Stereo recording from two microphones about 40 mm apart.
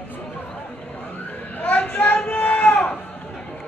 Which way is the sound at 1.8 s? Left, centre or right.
Left.